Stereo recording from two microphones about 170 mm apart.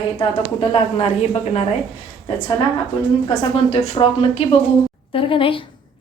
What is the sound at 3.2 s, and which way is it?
Speech, 35° left (ahead or behind).